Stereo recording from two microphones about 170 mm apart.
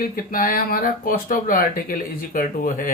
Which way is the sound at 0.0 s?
55° left (ahead or behind).